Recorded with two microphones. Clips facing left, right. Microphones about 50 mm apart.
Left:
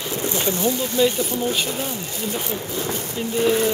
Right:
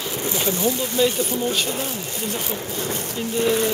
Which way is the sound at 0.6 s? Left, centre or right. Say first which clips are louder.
Left 1 dB; centre.